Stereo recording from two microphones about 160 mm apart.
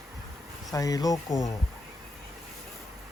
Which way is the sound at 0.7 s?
20° left (ahead or behind).